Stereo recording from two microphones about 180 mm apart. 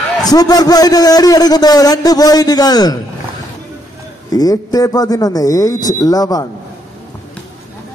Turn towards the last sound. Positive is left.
turn(degrees=20)  # may be behind; listen again after turning